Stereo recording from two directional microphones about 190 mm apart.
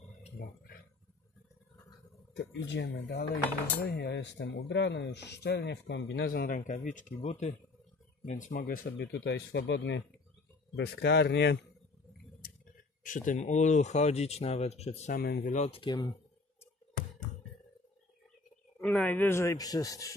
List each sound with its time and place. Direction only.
2.3 s speech: 70° left (ahead or behind)
13.0 s speech: 45° left (ahead or behind)
15.1 s speech: 55° left (ahead or behind)
15.5 s speech: 30° left (ahead or behind)
18.8 s a man's voice: 5° left (ahead or behind)